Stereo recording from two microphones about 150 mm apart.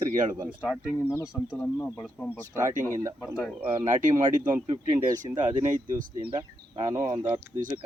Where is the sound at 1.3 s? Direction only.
5° right (ahead or behind).